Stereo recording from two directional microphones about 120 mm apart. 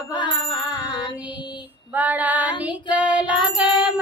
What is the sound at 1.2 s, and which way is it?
Female singing, 10° right (ahead or behind).